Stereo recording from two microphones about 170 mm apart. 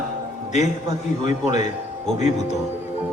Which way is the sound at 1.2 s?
45° left (ahead or behind).